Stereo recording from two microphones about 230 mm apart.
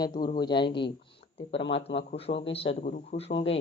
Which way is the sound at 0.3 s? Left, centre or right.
Centre.